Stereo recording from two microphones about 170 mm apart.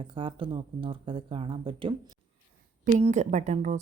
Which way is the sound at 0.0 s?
30° right (ahead or behind).